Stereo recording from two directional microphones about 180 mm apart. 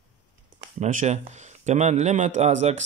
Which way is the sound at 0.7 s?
40° right (ahead or behind).